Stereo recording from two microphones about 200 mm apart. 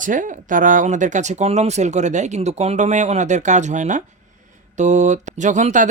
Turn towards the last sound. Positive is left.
turn(degrees=-40)  # may be behind; listen again after turning